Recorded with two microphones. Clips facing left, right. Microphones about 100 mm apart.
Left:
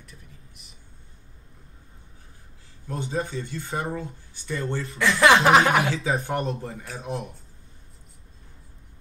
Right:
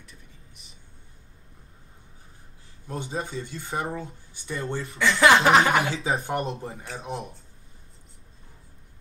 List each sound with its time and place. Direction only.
2.9 s speech: 20° right (ahead or behind)
4.9 s speech: centre (ahead or behind)
6.0 s speech: 25° right (ahead or behind)